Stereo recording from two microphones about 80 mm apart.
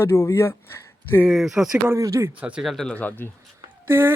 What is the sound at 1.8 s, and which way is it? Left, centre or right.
Speech, right.